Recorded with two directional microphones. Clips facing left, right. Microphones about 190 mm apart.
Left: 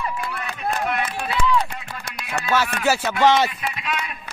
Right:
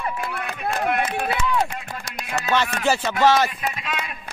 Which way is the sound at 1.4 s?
55° right (ahead or behind).